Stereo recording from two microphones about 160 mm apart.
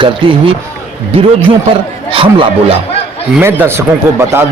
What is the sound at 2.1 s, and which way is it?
Speech, 30° right (ahead or behind).